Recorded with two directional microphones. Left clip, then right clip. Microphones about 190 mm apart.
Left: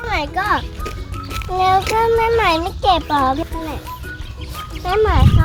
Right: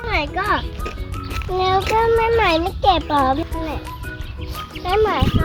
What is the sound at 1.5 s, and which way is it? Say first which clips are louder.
Speech: left 2 dB; 20° left (ahead or behind).